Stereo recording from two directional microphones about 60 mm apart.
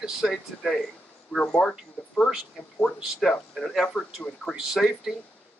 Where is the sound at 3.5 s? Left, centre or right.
Centre.